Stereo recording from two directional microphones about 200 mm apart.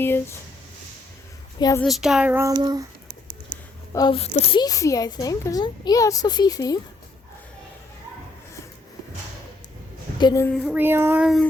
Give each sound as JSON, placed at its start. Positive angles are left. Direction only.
{"t": 0.0, "sound": "speech", "side_deg": 10}
{"t": 1.5, "sound": "a woman's voice", "side_deg": 20}
{"t": 1.8, "sound": "speech", "side_deg": 0}
{"t": 2.5, "sound": "a sound", "side_deg": -20}
{"t": 3.9, "sound": "a woman's voice", "side_deg": 25}
{"t": 10.2, "sound": "a woman's voice", "side_deg": 20}
{"t": 10.6, "sound": "speech", "side_deg": -5}